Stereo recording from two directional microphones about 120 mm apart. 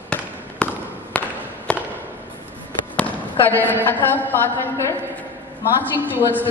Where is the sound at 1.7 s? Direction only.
10° left (ahead or behind).